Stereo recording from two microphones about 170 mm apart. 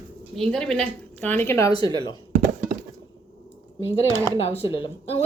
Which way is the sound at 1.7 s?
25° left (ahead or behind).